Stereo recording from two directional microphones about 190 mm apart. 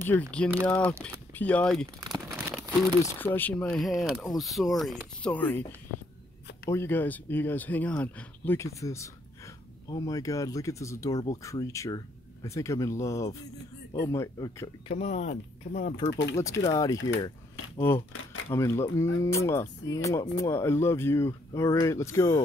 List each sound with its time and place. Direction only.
0.0 s speech: 10° left (ahead or behind)
2.0 s crumpling: 15° right (ahead or behind)
3.0 s speech: 10° left (ahead or behind)
6.7 s speech: 10° left (ahead or behind)
14.9 s speech: 35° left (ahead or behind)
16.3 s speech: 15° left (ahead or behind)
18.1 s a sound: 90° left
18.5 s speech: 15° left (ahead or behind)